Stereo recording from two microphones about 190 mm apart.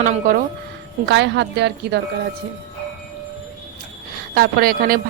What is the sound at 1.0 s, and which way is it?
Speech, 65° right (ahead or behind).